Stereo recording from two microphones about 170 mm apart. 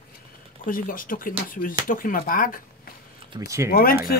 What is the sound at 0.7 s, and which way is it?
Speech, 55° left (ahead or behind).